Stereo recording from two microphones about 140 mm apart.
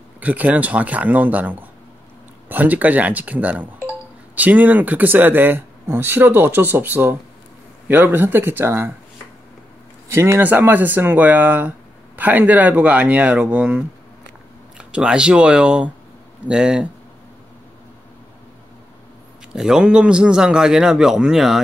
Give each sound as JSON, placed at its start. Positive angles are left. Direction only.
{"t": 0.2, "sound": "speech", "side_deg": -10}
{"t": 10.0, "sound": "a man's voice", "side_deg": -20}
{"t": 19.5, "sound": "a man's voice", "side_deg": -5}